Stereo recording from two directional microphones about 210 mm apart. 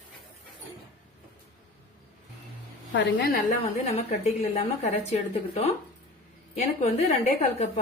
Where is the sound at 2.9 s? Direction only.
55° left (ahead or behind).